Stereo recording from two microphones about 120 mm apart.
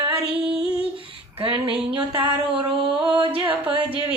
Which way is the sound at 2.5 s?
10° right (ahead or behind).